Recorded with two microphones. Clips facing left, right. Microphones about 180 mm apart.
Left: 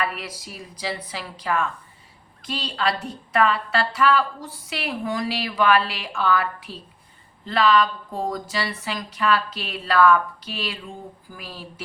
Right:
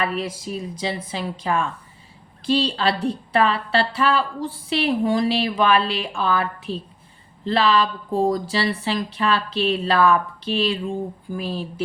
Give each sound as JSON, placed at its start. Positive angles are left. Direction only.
{"t": 0.0, "sound": "a woman's voice", "side_deg": -25}